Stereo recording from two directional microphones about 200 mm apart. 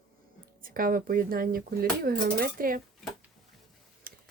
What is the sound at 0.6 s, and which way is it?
A woman's voice, 45° right (ahead or behind).